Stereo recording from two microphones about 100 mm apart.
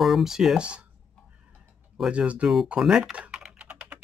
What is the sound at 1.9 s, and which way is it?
Speech, 10° right (ahead or behind).